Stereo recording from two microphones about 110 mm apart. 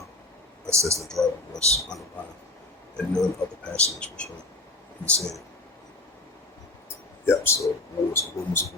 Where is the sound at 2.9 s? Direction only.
5° left (ahead or behind).